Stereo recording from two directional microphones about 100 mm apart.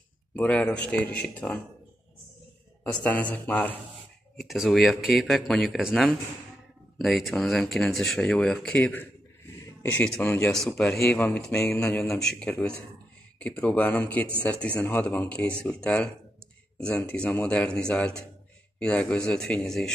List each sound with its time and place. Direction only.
0.4 s speech: 15° left (ahead or behind)
2.8 s speech: 15° left (ahead or behind)
4.4 s speech: centre (ahead or behind)
7.0 s speech: centre (ahead or behind)
11.5 s speech: 25° left (ahead or behind)
11.8 s speech: 10° left (ahead or behind)